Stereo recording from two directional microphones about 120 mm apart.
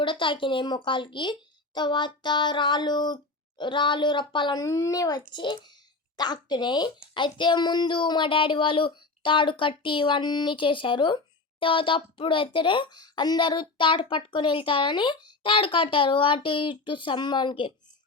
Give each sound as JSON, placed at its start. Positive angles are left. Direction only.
{"t": 0.0, "sound": "a woman's voice", "side_deg": 45}
{"t": 4.6, "sound": "a woman's voice", "side_deg": 30}